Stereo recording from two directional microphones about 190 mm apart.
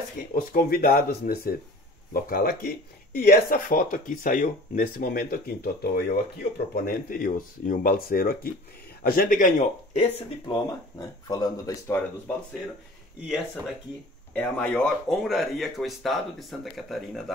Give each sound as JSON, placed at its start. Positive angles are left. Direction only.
{"t": 0.4, "sound": "speech", "side_deg": 50}
{"t": 10.4, "sound": "speech", "side_deg": 20}
{"t": 14.3, "sound": "speech", "side_deg": 5}